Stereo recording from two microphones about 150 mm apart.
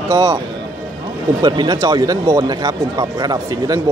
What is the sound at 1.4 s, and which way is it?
Speech, 30° right (ahead or behind).